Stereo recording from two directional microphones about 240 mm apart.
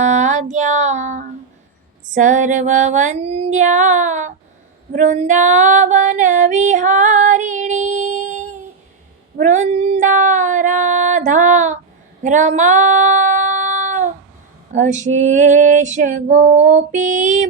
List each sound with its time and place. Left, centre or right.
0.0 s music: right
2.1 s female singing: right